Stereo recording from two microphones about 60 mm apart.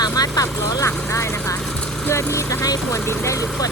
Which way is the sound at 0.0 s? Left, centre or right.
Left.